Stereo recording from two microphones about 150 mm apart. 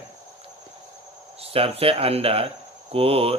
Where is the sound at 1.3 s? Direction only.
40° right (ahead or behind).